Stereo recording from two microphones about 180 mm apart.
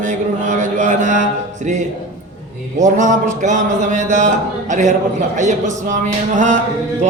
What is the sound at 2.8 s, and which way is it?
Speech, 45° right (ahead or behind).